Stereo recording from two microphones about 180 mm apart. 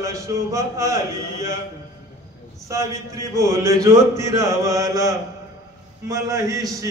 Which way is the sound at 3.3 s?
15° right (ahead or behind).